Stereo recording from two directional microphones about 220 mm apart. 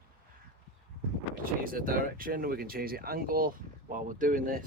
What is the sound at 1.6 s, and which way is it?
Speech, 40° right (ahead or behind).